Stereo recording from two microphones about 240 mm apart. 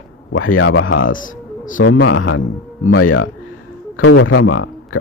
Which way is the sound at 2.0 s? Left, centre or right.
Left.